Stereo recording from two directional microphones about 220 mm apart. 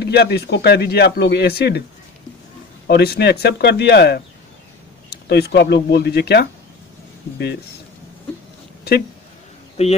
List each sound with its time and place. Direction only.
0.0 s speech: 50° left (ahead or behind)
2.9 s speech: 45° left (ahead or behind)
9.8 s speech: 30° left (ahead or behind)